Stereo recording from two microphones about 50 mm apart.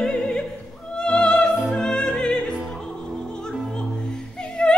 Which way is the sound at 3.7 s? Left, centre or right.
Centre.